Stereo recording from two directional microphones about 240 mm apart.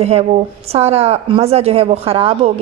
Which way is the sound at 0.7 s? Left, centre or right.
Right.